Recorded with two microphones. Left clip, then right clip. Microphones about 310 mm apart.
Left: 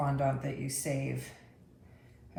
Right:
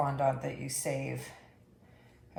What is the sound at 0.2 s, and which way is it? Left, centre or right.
Speech, centre.